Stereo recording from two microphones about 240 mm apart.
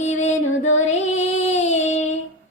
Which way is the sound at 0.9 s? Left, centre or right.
Left.